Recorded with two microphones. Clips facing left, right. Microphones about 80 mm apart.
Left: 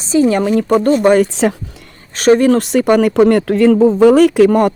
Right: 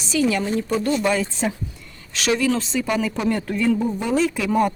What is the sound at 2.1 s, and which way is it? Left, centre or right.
Speech, left.